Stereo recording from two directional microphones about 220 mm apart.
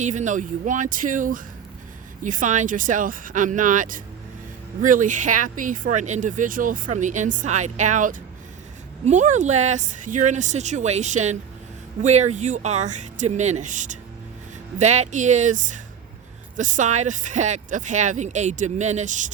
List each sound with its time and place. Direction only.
0.0 s speech: 35° right (ahead or behind)